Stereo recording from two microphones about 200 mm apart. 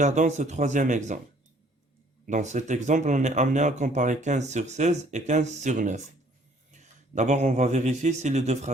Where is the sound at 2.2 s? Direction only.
35° right (ahead or behind).